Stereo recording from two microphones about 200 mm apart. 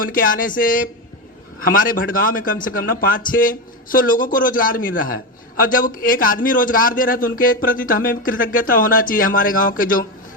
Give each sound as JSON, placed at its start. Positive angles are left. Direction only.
{"t": 0.0, "sound": "a man's voice", "side_deg": 45}